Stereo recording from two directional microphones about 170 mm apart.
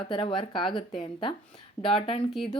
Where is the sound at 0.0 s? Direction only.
30° left (ahead or behind).